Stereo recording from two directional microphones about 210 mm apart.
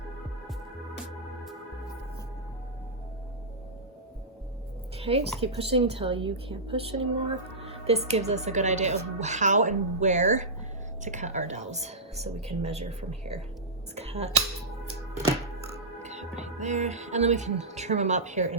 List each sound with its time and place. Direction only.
4.9 s a woman's voice: 30° right (ahead or behind)
16.0 s speech: 35° right (ahead or behind)